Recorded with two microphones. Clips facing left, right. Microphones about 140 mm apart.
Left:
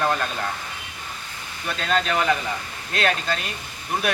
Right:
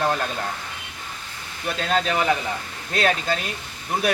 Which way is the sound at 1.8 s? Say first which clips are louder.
Even; 5° right (ahead or behind).